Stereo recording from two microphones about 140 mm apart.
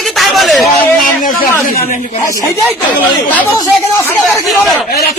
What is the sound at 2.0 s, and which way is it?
Speech, 65° left (ahead or behind).